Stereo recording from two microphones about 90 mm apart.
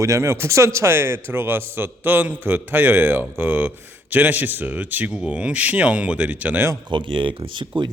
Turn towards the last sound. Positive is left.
turn(degrees=-60)  # may be behind; listen again after turning